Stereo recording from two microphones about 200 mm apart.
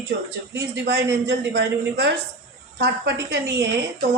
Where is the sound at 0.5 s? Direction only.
55° right (ahead or behind).